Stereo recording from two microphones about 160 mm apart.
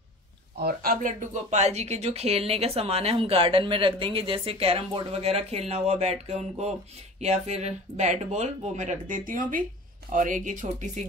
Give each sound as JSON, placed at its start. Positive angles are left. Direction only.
{"t": 0.6, "sound": "speech", "side_deg": -80}
{"t": 1.0, "sound": "speech", "side_deg": -50}